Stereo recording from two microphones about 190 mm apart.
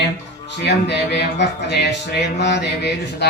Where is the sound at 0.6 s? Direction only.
60° left (ahead or behind).